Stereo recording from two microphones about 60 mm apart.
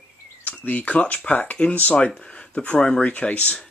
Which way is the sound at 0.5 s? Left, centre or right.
Left.